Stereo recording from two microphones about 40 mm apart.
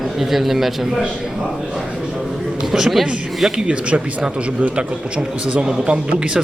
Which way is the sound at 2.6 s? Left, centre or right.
Centre.